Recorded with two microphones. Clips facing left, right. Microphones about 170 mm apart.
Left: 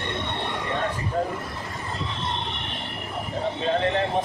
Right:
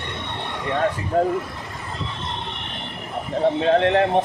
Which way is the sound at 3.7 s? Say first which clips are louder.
Right 4 dB; 70° right (ahead or behind).